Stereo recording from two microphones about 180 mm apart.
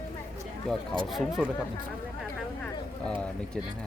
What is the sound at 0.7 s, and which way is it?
Speech, 5° left (ahead or behind).